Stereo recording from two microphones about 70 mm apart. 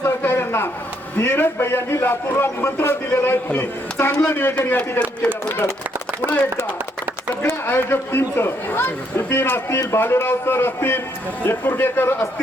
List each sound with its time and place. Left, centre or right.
0.0 s a sound: left
1.2 s speech: left
4.8 s speech: centre
7.4 s speech: left